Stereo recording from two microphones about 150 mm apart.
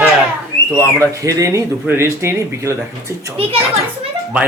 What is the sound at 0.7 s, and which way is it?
Speech, 20° right (ahead or behind).